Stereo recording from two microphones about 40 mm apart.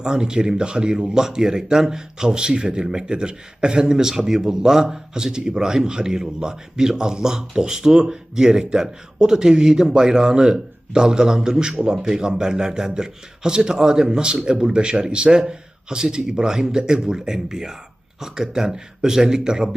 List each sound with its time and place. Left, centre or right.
0.0 s speech: centre